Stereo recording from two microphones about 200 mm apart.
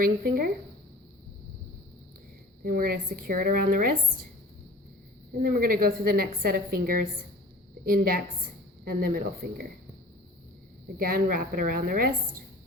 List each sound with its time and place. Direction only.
0.0 s a woman's voice: 45° right (ahead or behind)
2.6 s a woman's voice: 45° right (ahead or behind)
5.4 s a woman's voice: 45° right (ahead or behind)
10.9 s a woman's voice: 45° right (ahead or behind)